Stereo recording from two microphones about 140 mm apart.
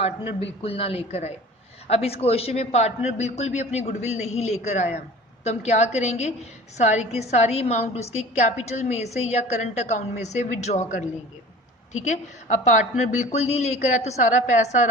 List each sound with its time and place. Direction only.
0.4 s a woman's voice: 45° left (ahead or behind)